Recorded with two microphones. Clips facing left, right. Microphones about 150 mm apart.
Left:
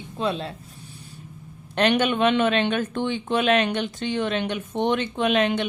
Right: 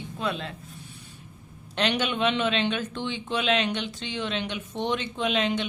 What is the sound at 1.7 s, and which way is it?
Speech, 50° left (ahead or behind).